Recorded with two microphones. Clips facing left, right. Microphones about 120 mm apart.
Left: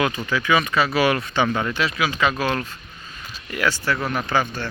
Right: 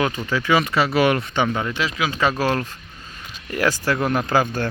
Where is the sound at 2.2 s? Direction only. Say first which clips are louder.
Right 3 dB; 35° right (ahead or behind).